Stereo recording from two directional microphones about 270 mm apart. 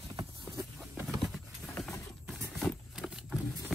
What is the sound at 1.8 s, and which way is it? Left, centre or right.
Vehicle, centre.